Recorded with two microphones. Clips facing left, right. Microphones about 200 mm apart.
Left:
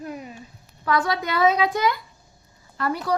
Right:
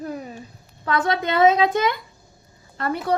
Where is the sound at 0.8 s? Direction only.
25° right (ahead or behind).